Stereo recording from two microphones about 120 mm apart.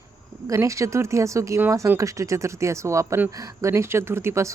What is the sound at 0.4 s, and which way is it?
Speech, 25° right (ahead or behind).